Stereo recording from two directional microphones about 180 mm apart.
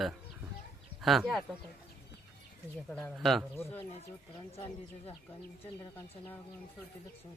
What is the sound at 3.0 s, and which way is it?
Speech, centre (ahead or behind).